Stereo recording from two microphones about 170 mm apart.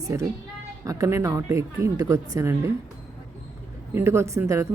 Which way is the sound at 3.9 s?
15° right (ahead or behind).